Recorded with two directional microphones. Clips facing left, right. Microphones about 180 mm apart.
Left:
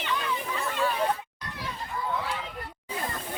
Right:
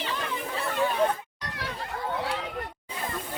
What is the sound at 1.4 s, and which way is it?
Chatter, 75° right (ahead or behind).